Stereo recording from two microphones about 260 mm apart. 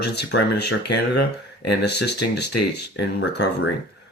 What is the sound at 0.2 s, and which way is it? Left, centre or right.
Speech, left.